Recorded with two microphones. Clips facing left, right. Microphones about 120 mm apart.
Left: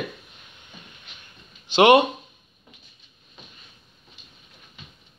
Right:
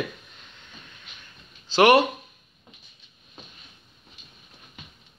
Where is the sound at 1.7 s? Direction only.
20° left (ahead or behind).